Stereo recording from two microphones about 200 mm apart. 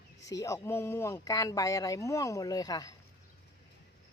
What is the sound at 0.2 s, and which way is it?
Speech, 15° left (ahead or behind).